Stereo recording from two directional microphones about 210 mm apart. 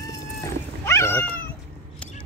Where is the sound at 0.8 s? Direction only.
10° left (ahead or behind).